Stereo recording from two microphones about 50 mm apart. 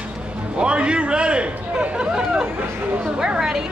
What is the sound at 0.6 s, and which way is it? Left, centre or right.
A man's voice, right.